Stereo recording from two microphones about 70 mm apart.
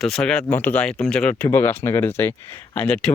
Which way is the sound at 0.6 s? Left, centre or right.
Left.